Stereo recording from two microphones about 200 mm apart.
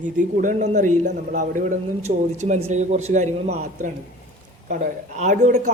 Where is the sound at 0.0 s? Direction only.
40° right (ahead or behind).